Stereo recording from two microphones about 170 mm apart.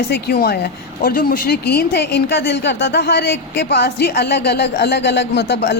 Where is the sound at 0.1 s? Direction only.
65° left (ahead or behind).